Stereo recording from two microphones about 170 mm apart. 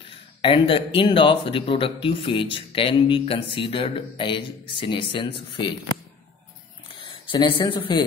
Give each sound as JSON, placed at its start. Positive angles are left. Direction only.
{"t": 0.4, "sound": "speech", "side_deg": 30}
{"t": 7.1, "sound": "speech", "side_deg": 30}